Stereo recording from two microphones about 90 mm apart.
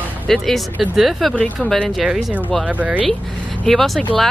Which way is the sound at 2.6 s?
15° right (ahead or behind).